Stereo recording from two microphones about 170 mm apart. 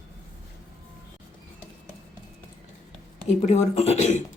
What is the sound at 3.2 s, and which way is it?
Speech, 40° left (ahead or behind).